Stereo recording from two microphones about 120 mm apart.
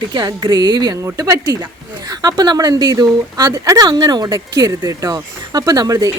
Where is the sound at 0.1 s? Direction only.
35° right (ahead or behind).